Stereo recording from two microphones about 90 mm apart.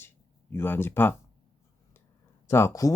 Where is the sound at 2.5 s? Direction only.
30° left (ahead or behind).